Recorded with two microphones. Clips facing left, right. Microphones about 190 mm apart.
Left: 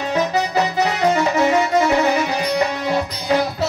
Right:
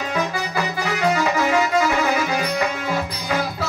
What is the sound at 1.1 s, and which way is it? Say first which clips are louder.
Music: left 2 dB; 25° left (ahead or behind).